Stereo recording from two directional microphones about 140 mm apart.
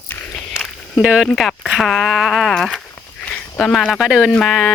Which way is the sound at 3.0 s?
10° left (ahead or behind).